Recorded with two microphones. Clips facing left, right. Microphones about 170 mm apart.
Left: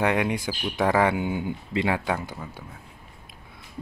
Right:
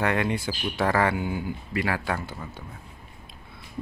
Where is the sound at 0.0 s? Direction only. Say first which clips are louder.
Left 2 dB; 15° left (ahead or behind).